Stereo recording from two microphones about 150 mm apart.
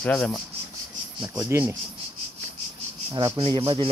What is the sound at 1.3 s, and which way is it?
Speech, 20° right (ahead or behind).